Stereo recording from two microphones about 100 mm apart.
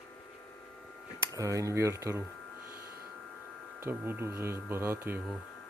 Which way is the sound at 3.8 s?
25° right (ahead or behind).